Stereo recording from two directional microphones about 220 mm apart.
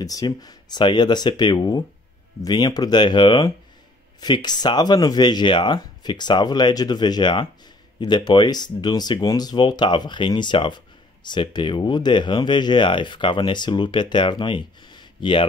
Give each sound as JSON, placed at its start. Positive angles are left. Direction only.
{"t": 0.0, "sound": "speech", "side_deg": 15}